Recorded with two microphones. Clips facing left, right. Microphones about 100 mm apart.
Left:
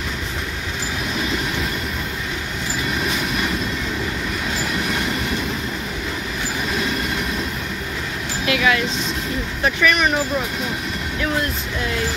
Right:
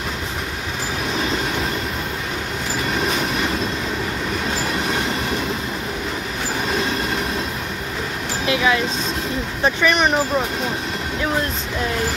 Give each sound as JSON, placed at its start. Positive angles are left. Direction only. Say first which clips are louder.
{"t": 8.5, "sound": "speech", "louder": "even", "side_deg": -25}